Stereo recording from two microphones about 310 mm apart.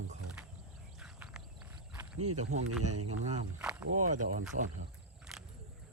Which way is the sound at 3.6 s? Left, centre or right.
Centre.